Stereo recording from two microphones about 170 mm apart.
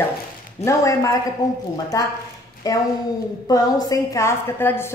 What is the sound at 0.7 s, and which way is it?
Speech, 20° left (ahead or behind).